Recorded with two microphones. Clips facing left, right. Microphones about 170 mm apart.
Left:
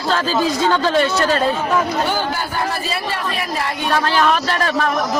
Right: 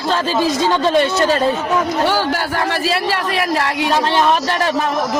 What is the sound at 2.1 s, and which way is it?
A man's voice, 80° right.